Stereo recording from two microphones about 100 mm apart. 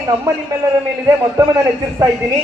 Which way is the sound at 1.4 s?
30° right (ahead or behind).